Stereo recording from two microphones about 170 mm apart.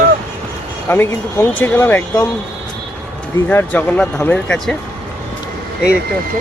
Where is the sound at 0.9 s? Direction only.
15° left (ahead or behind).